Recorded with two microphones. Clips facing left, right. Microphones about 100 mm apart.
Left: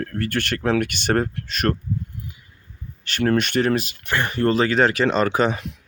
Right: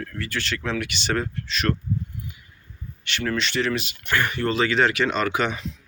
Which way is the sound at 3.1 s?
45° left (ahead or behind).